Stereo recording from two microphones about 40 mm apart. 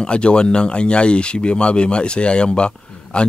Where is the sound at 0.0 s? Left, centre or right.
Left.